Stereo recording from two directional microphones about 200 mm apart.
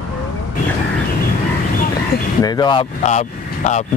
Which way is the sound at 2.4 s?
20° left (ahead or behind).